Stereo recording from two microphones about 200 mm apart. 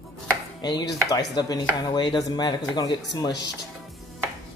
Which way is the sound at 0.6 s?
20° left (ahead or behind).